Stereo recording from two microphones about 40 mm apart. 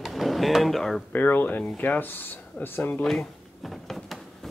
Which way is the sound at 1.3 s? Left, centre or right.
Left.